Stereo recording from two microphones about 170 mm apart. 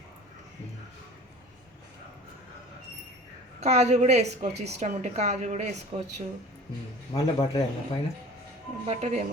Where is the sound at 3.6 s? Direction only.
40° right (ahead or behind).